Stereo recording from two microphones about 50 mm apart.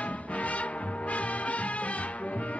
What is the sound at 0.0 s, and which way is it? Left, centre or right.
Music, left.